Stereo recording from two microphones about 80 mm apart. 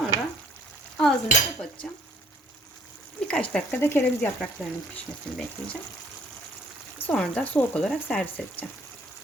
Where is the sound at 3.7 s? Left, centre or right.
Left.